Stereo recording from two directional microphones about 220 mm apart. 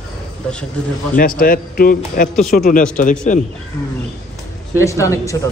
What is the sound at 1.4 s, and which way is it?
Speech, 40° left (ahead or behind).